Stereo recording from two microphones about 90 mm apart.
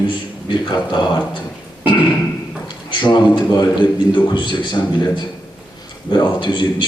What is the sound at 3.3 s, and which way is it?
A man's voice, 60° left (ahead or behind).